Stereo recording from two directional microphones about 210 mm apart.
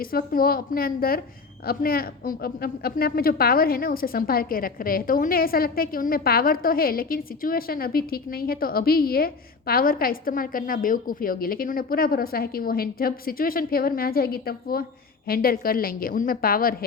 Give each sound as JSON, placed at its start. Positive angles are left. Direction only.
{"t": 0.0, "sound": "a woman's voice", "side_deg": 45}